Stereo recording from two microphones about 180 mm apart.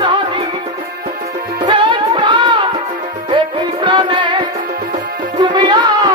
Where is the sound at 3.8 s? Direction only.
25° right (ahead or behind).